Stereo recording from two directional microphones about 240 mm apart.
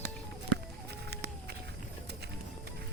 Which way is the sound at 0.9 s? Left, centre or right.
Right.